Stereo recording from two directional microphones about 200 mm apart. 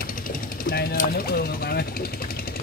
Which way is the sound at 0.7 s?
50° left (ahead or behind).